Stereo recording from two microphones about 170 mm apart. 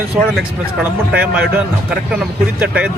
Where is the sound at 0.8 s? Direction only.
10° right (ahead or behind).